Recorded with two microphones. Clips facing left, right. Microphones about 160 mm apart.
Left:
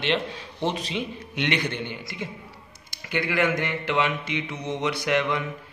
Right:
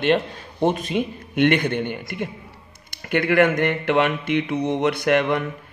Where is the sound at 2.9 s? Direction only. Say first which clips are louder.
Right 7 dB; 55° right (ahead or behind).